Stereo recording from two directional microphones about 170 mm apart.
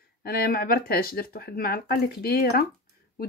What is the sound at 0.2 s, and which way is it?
Speech, 65° left (ahead or behind).